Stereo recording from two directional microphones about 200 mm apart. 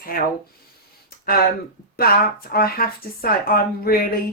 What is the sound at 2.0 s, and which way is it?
Speech, 50° left (ahead or behind).